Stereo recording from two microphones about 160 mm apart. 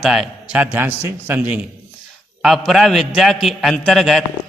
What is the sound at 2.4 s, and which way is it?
A man's voice, centre (ahead or behind).